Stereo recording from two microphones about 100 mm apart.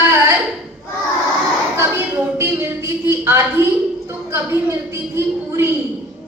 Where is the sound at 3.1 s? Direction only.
25° right (ahead or behind).